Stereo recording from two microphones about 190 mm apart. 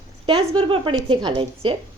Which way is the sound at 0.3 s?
30° right (ahead or behind).